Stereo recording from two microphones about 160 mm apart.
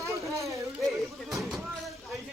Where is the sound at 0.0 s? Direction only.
20° right (ahead or behind).